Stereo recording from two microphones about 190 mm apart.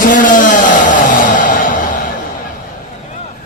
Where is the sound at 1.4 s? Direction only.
45° left (ahead or behind).